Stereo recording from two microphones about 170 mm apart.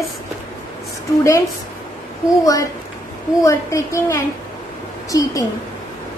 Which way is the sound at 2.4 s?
20° left (ahead or behind).